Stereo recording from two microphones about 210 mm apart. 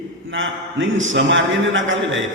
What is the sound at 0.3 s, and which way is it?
A man's voice, 65° right (ahead or behind).